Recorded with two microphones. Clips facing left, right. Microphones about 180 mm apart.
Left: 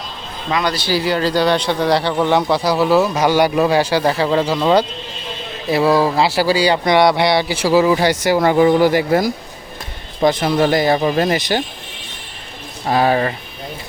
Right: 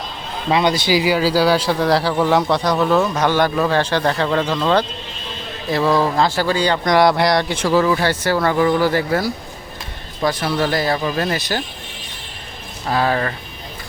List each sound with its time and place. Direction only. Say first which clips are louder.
0.5 s speech: right 2 dB; 20° right (ahead or behind); by 11.6 s 20° left (ahead or behind)
12.9 s speech: left 3 dB; 20° left (ahead or behind)